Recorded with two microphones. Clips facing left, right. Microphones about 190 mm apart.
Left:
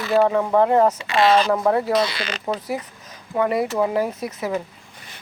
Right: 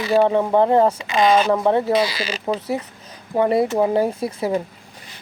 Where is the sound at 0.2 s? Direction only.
30° right (ahead or behind).